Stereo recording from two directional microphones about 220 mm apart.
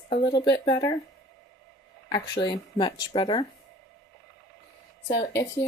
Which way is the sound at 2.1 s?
20° left (ahead or behind).